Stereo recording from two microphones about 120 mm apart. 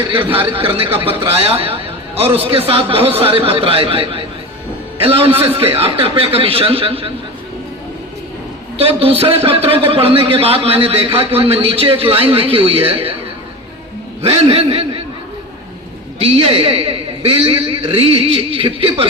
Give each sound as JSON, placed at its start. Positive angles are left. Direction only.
{"t": 0.3, "sound": "a man's voice", "side_deg": -50}
{"t": 8.8, "sound": "a man's voice", "side_deg": -55}
{"t": 14.2, "sound": "a man's voice", "side_deg": -55}
{"t": 16.2, "sound": "a man's voice", "side_deg": -50}